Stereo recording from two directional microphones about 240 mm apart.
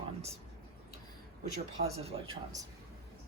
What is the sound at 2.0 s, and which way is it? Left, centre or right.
Speech, right.